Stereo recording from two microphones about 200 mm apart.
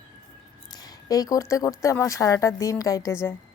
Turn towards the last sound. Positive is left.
turn(degrees=15)  # may be behind; listen again after turning